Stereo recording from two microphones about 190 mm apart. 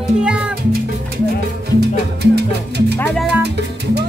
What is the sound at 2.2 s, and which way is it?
Music, 60° right (ahead or behind).